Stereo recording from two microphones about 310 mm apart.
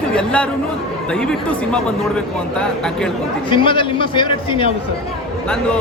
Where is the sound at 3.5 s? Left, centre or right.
Centre.